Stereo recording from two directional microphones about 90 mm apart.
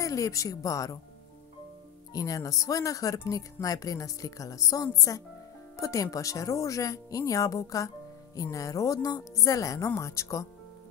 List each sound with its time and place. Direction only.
0.0 s speech: 35° left (ahead or behind)
2.1 s speech: 40° left (ahead or behind)